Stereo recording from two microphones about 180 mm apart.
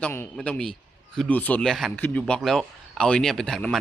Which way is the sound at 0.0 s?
10° left (ahead or behind).